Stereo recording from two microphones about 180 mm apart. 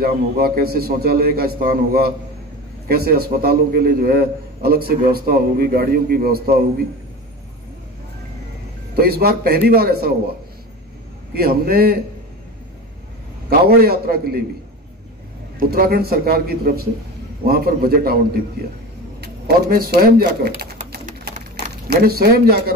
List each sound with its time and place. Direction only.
0.0 s a man's voice: 60° right (ahead or behind)
8.9 s a man's voice: 60° right (ahead or behind)
11.3 s a man's voice: 60° right (ahead or behind)
13.5 s a man's voice: 55° right (ahead or behind)
15.7 s a man's voice: 60° right (ahead or behind)
21.8 s a man's voice: 60° right (ahead or behind)